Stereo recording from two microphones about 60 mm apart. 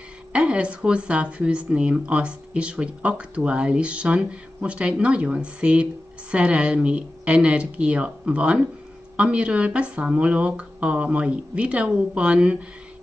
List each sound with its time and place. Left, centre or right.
0.3 s speech: centre